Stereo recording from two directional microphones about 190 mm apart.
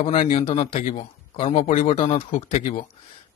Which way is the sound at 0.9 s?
30° left (ahead or behind).